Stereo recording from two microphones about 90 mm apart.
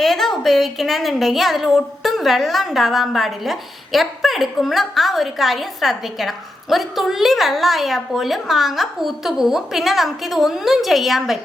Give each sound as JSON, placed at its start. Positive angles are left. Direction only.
{"t": 0.0, "sound": "a woman's voice", "side_deg": 5}